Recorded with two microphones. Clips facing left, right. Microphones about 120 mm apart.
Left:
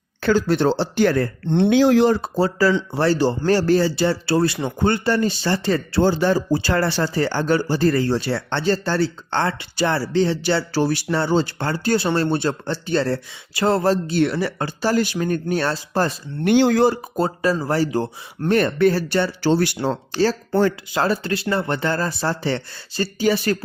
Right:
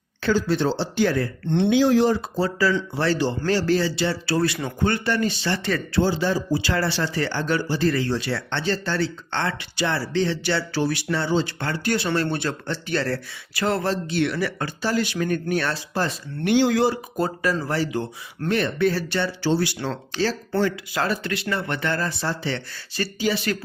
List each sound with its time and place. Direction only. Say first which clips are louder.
0.3 s speech: left 4 dB; 60° left (ahead or behind)
1.5 s speech: left 3 dB; 35° left (ahead or behind)
1.7 s speech: left 3 dB; 70° left (ahead or behind)
2.1 s speech: left 4 dB; 40° left (ahead or behind)
4.4 s speech: left 3 dB; 30° left (ahead or behind)
6.0 s speech: left 4 dB; 55° left (ahead or behind)
17.2 s speech: left 3 dB; 30° left (ahead or behind); by 19.3 s 45° left (ahead or behind)
19.5 s speech: left 3 dB; 60° left (ahead or behind)
20.9 s speech: left 4 dB; 35° left (ahead or behind)